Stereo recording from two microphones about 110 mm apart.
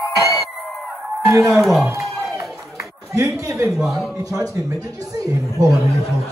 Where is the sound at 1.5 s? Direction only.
Centre (ahead or behind).